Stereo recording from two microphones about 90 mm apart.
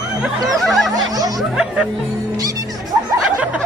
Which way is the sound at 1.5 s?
10° right (ahead or behind).